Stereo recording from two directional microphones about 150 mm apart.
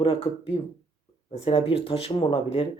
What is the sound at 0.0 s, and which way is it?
Speech, 40° left (ahead or behind).